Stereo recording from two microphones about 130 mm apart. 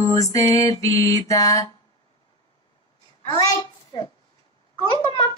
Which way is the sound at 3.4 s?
30° left (ahead or behind).